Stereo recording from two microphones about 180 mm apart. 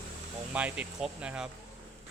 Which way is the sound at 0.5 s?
10° right (ahead or behind).